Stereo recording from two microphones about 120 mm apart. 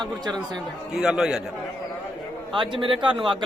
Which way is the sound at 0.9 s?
5° right (ahead or behind).